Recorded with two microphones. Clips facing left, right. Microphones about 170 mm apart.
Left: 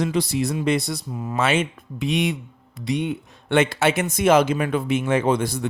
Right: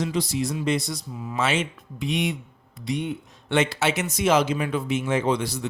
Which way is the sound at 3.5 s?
55° left (ahead or behind).